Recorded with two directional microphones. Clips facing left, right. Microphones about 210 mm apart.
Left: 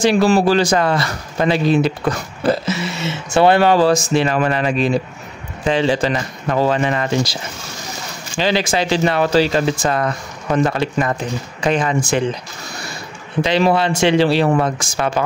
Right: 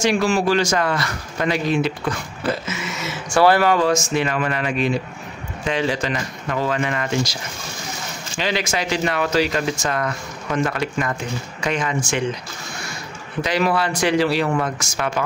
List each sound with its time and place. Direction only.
0.0 s speech: 35° left (ahead or behind)
8.4 s speech: 30° left (ahead or behind)
13.4 s speech: 25° left (ahead or behind)